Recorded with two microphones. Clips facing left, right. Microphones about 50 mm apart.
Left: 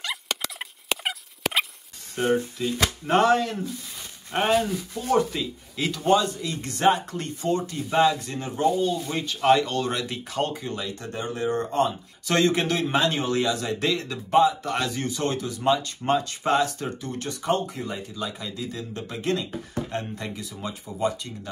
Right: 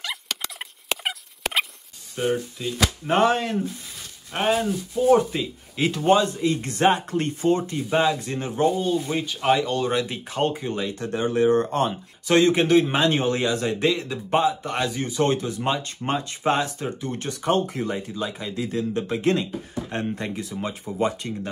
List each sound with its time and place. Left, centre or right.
0.0 s turkey: centre
2.2 s speech: left
3.1 s speech: right
4.3 s speech: centre
5.1 s speech: right
9.2 s speech: centre; by 11.9 s right
12.3 s speech: right
15.2 s speech: right
18.1 s speech: right